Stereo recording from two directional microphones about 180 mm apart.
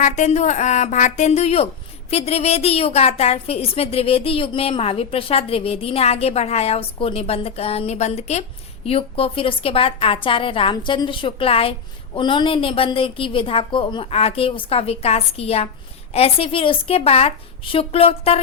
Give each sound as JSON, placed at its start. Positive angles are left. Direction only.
{"t": 0.0, "sound": "a woman's voice", "side_deg": 40}